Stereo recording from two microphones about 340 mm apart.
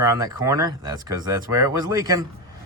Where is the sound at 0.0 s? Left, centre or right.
Centre.